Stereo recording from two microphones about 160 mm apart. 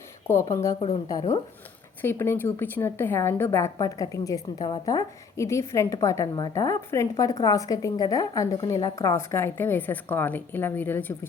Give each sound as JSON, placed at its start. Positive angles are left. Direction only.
{"t": 0.3, "sound": "a woman's voice", "side_deg": 20}
{"t": 2.0, "sound": "a woman's voice", "side_deg": 15}